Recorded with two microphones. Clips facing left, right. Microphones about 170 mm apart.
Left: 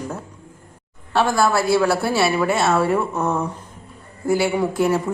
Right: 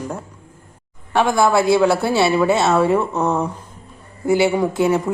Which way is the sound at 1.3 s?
20° right (ahead or behind).